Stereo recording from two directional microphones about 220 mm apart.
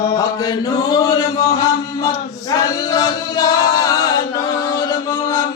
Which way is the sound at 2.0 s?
15° left (ahead or behind).